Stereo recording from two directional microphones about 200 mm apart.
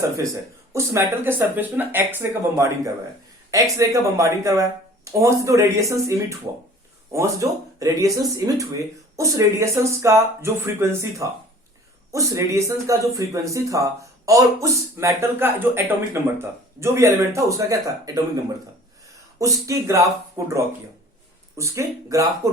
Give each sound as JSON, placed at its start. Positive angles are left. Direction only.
{"t": 0.7, "sound": "speech", "side_deg": -15}
{"t": 19.4, "sound": "speech", "side_deg": -15}